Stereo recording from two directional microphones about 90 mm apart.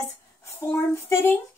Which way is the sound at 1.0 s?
25° left (ahead or behind).